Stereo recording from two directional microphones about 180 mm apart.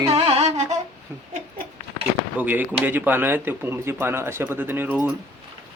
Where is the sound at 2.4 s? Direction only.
10° right (ahead or behind).